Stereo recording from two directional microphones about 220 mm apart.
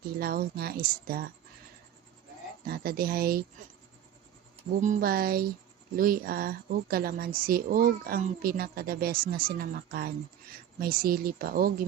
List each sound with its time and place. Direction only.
0.2 s speech: 45° right (ahead or behind)
2.6 s speech: 45° right (ahead or behind)
4.8 s speech: 40° right (ahead or behind)